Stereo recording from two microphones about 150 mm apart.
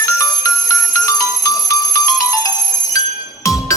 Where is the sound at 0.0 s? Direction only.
20° left (ahead or behind).